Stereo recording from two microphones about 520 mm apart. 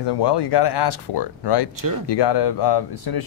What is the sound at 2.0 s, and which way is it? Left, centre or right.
Speech, left.